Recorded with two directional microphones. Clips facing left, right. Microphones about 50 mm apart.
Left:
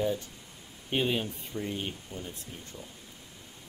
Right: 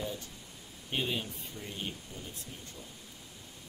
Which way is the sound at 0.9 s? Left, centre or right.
Left.